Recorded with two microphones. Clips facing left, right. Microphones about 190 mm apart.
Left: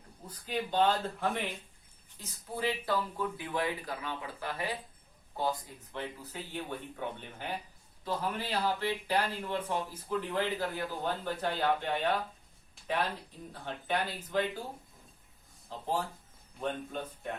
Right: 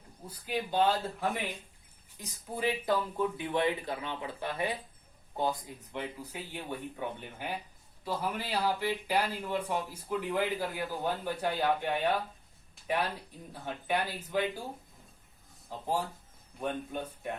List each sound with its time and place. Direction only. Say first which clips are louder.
0.3 s speech: right 1 dB; 10° right (ahead or behind)
2.1 s speech: right 1 dB; 15° right (ahead or behind)
15.7 s speech: right 1 dB; 10° right (ahead or behind)